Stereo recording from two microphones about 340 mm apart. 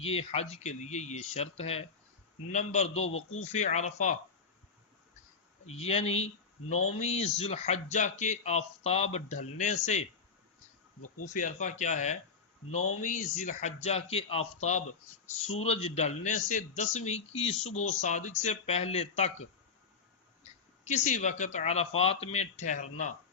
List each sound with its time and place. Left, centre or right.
0.0 s speech: centre
2.9 s a man's voice: left
3.5 s speech: centre
5.8 s speech: centre
11.2 s speech: left
20.4 s speech: centre